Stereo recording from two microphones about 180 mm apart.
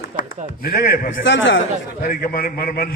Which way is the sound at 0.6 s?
55° left (ahead or behind).